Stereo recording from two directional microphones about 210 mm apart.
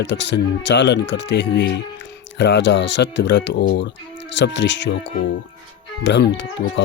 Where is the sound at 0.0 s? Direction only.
55° left (ahead or behind).